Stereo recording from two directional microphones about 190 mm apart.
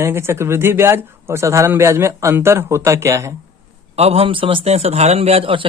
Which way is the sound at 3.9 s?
30° right (ahead or behind).